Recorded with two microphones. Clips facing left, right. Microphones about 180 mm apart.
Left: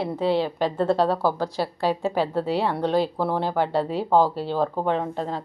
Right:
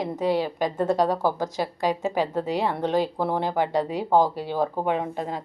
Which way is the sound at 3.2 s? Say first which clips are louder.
Left 1 dB; 15° right (ahead or behind).